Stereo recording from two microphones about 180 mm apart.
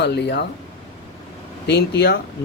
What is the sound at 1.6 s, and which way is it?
Speech, 70° left (ahead or behind).